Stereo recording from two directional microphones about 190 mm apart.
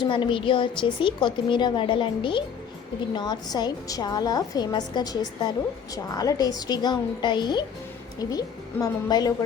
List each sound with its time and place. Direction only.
0.0 s speech: 25° left (ahead or behind)